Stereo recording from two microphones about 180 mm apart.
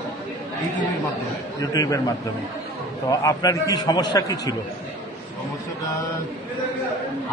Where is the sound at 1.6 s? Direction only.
20° left (ahead or behind).